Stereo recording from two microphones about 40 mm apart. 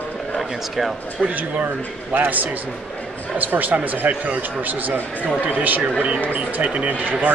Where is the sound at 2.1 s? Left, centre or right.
Right.